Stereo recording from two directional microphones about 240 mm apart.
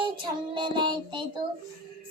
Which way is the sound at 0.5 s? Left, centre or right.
Centre.